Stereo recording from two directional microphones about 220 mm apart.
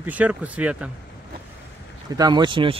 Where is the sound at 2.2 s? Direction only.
20° right (ahead or behind).